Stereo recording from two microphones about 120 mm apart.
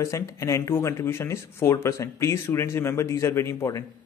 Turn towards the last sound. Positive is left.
turn(degrees=25)  # may be behind; listen again after turning